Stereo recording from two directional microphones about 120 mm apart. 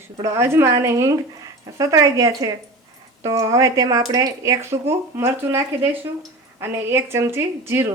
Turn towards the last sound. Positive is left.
turn(degrees=-20)  # may be behind; listen again after turning